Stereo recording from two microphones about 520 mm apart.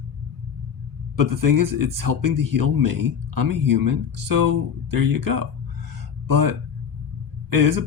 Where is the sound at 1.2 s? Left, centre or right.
Right.